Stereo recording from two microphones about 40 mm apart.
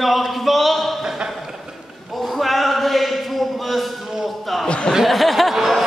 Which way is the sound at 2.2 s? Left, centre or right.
Centre.